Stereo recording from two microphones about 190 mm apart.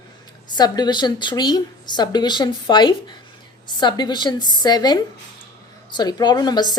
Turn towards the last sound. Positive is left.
turn(degrees=20)  # may be behind; listen again after turning